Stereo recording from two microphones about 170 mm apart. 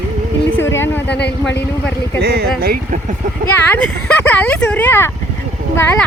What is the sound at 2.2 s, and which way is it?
Speech, 70° right (ahead or behind).